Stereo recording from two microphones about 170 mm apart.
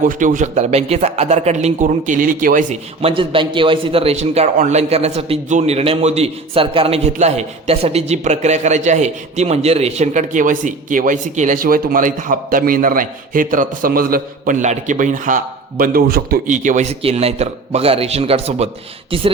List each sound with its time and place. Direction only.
0.0 s a man's voice: 50° right (ahead or behind)
3.0 s a man's voice: 30° right (ahead or behind); by 15.4 s 50° right (ahead or behind)
15.8 s a man's voice: 60° right (ahead or behind); by 19.3 s 30° right (ahead or behind)